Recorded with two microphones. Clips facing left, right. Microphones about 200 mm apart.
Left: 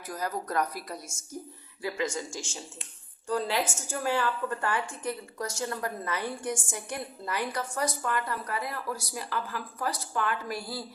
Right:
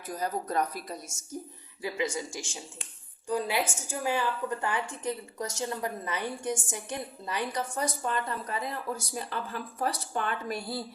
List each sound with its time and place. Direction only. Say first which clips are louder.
0.1 s a woman's voice: right 1 dB; 25° right (ahead or behind)